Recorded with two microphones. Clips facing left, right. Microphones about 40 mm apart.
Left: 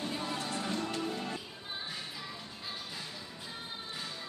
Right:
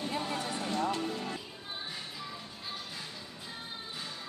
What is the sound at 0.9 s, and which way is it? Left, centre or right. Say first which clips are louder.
Music: right 3 dB; right.